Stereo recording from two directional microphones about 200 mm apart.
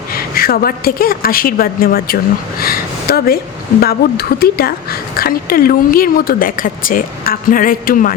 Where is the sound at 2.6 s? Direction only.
50° left (ahead or behind).